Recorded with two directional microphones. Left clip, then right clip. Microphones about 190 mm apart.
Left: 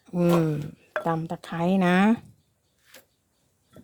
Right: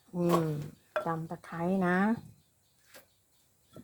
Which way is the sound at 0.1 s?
45° left (ahead or behind).